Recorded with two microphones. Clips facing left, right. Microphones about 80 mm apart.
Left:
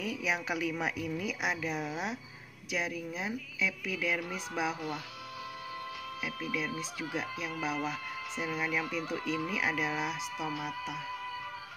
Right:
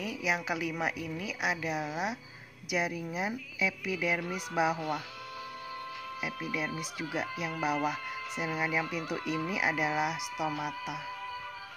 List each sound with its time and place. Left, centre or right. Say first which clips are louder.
0.0 s a woman's voice: right 1 dB; centre
6.2 s speech: right 1 dB; centre